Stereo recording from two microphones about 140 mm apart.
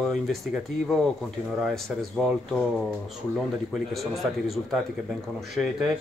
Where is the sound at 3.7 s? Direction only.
Centre (ahead or behind).